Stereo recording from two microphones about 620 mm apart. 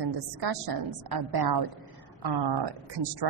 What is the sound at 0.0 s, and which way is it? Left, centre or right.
A woman's voice, right.